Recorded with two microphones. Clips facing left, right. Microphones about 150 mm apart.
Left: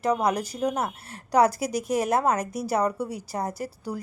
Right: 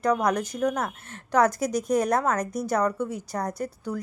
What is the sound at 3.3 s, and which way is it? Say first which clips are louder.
Speech: left 1 dB; 30° left (ahead or behind).